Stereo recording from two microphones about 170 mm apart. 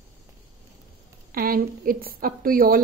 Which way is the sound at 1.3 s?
60° right (ahead or behind).